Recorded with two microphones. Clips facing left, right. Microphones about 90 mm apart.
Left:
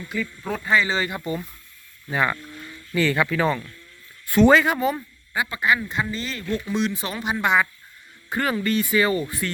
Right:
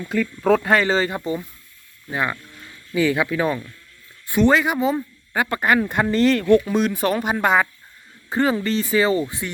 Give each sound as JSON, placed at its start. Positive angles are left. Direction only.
{"t": 0.1, "sound": "speech", "side_deg": -85}
{"t": 0.9, "sound": "speech", "side_deg": -35}
{"t": 2.0, "sound": "speech", "side_deg": -5}
{"t": 2.9, "sound": "speech", "side_deg": -15}
{"t": 4.7, "sound": "speech", "side_deg": -15}
{"t": 5.3, "sound": "speech", "side_deg": -50}
{"t": 6.5, "sound": "speech", "side_deg": -45}
{"t": 8.3, "sound": "speech", "side_deg": -25}